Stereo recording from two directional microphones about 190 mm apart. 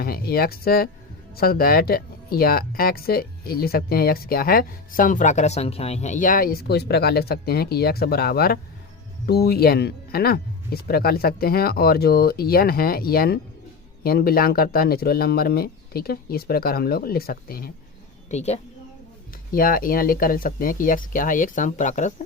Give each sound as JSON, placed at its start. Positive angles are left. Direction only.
{"t": 0.0, "sound": "speech", "side_deg": 50}
{"t": 18.3, "sound": "speech", "side_deg": 35}
{"t": 19.5, "sound": "speech", "side_deg": 50}